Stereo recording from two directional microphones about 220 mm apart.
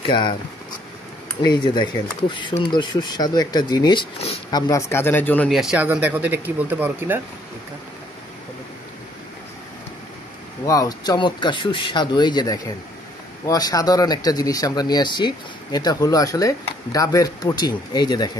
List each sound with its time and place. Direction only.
0.0 s speech: 20° left (ahead or behind)
1.4 s speech: 20° left (ahead or behind); by 7.2 s 10° right (ahead or behind)
10.6 s speech: 15° left (ahead or behind)